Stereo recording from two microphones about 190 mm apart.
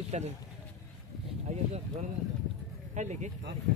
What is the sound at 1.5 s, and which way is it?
Speech, 40° right (ahead or behind).